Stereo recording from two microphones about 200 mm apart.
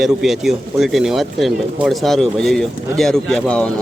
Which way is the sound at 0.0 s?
Centre (ahead or behind).